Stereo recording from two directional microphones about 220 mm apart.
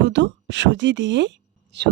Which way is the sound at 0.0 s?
55° right (ahead or behind).